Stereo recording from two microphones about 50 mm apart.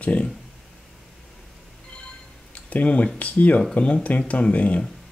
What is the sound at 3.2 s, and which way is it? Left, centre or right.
Speech, left.